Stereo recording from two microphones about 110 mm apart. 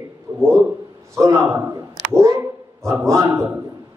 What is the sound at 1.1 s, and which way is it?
A man's voice, 30° right (ahead or behind).